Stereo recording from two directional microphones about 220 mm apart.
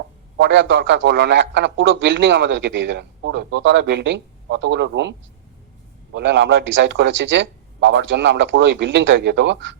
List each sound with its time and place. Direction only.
0.3 s a man's voice: 55° right (ahead or behind)
6.1 s a man's voice: 55° right (ahead or behind)